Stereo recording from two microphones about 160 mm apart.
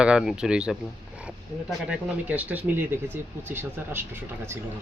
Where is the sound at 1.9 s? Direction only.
5° right (ahead or behind).